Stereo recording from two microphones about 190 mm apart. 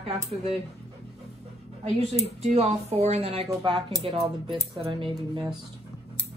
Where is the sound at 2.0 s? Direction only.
35° right (ahead or behind).